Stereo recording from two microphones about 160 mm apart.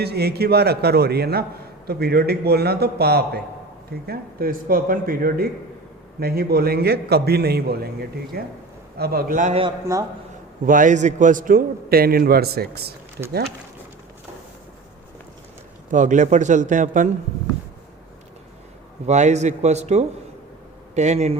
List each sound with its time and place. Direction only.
0.0 s a man's voice: 90° right
4.0 s a man's voice: 70° right (ahead or behind)
8.3 s a man's voice: 75° right (ahead or behind); by 9.6 s 55° right (ahead or behind)
10.7 s a man's voice: 55° right (ahead or behind); by 13.2 s 80° right
15.9 s a man's voice: 50° right (ahead or behind)
19.0 s a man's voice: 45° right (ahead or behind)